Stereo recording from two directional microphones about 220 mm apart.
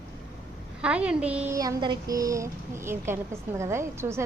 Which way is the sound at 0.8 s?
5° right (ahead or behind).